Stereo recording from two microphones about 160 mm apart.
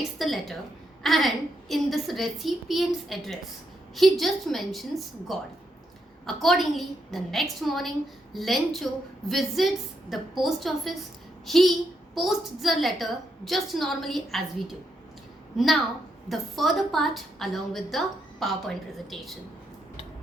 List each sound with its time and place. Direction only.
0.2 s a woman's voice: centre (ahead or behind)
15.5 s a woman's voice: centre (ahead or behind)